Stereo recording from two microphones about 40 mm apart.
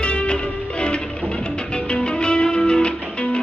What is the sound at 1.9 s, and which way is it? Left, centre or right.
Music, left.